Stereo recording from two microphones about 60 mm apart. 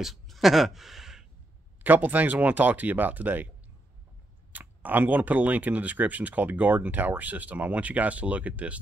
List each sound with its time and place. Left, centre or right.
0.0 s speech: centre
1.8 s speech: right
4.5 s speech: right